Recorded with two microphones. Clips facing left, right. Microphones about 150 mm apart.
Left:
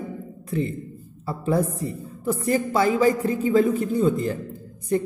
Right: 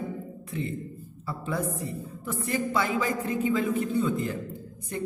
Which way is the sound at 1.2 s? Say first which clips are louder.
Left 8 dB; 40° left (ahead or behind).